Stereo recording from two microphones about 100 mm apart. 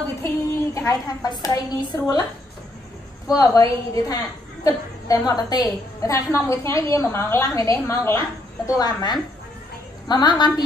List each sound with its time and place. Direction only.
0.7 s a woman's voice: 35° left (ahead or behind)
3.3 s a woman's voice: 35° left (ahead or behind)
8.6 s speech: 40° left (ahead or behind)